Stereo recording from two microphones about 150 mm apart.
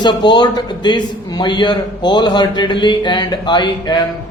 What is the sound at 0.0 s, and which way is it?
A man's voice, 30° left (ahead or behind).